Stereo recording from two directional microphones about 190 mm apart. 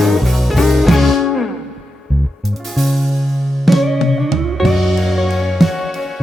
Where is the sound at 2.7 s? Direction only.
Centre (ahead or behind).